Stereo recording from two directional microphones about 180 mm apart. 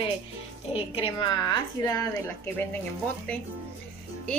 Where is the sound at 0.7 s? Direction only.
30° left (ahead or behind); by 2.8 s 10° left (ahead or behind).